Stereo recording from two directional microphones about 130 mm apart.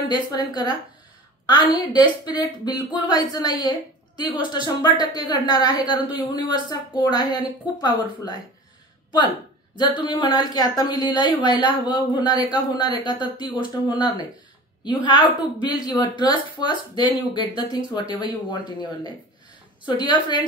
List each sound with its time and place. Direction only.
0.1 s a woman's voice: 30° left (ahead or behind)
1.9 s a woman's voice: 35° left (ahead or behind)
10.0 s a woman's voice: 35° left (ahead or behind)